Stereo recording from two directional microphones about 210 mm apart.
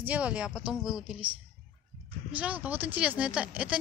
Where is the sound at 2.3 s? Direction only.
5° right (ahead or behind).